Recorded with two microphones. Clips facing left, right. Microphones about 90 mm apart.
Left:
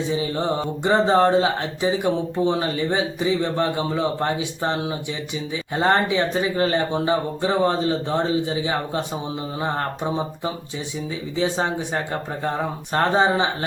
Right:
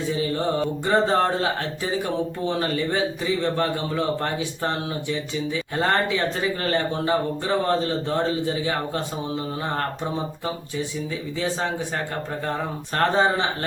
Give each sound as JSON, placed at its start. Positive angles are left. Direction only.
{"t": 0.0, "sound": "mantra", "side_deg": 20}
{"t": 12.5, "sound": "speech", "side_deg": 20}